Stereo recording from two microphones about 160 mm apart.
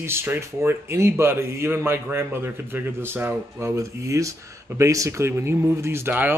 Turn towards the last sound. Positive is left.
turn(degrees=-10)  # may be behind; listen again after turning